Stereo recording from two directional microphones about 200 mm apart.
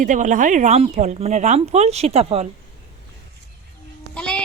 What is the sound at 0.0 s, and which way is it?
Speech, 40° right (ahead or behind).